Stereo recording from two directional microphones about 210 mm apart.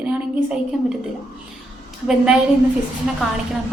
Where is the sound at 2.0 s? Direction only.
5° right (ahead or behind).